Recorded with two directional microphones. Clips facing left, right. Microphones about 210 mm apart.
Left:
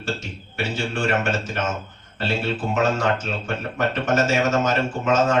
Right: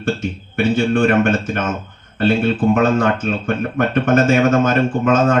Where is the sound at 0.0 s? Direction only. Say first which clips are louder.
Right 8 dB; 55° right (ahead or behind).